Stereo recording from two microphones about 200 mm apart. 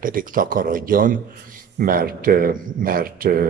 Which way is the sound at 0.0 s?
45° right (ahead or behind).